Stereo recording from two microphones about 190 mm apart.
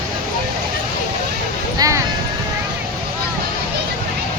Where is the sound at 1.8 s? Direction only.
20° right (ahead or behind).